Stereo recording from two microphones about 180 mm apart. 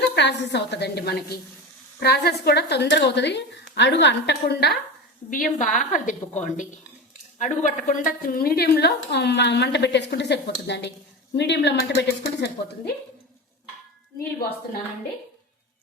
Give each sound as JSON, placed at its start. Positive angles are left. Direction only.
{"t": 0.1, "sound": "a woman's voice", "side_deg": 70}
{"t": 5.3, "sound": "a woman's voice", "side_deg": 45}